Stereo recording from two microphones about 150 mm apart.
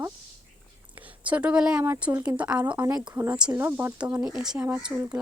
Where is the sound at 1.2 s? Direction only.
10° right (ahead or behind).